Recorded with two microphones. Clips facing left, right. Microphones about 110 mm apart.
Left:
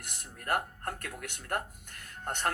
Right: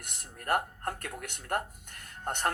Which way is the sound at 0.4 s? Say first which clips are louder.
Right 2 dB; 30° right (ahead or behind).